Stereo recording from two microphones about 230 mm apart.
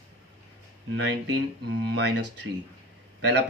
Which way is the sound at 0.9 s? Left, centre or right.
Right.